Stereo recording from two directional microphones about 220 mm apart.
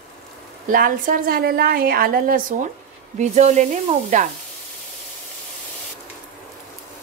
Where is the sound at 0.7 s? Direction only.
40° right (ahead or behind).